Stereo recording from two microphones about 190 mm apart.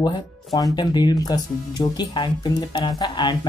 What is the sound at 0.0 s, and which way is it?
Speech, 20° left (ahead or behind).